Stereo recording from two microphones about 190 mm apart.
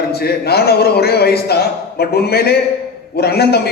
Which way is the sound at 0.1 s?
55° left (ahead or behind).